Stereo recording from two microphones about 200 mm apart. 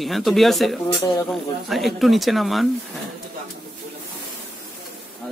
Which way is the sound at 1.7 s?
Centre (ahead or behind).